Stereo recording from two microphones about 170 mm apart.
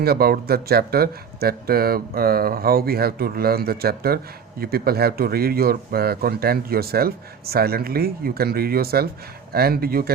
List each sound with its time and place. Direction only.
0.0 s speech: 65° right (ahead or behind)